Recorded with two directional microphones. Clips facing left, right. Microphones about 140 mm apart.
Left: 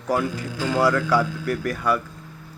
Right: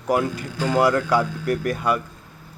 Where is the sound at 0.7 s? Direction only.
20° right (ahead or behind).